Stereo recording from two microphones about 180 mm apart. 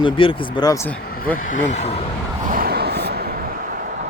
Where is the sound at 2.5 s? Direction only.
55° right (ahead or behind).